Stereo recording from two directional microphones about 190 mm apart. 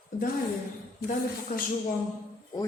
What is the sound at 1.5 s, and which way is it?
Speech, 40° left (ahead or behind).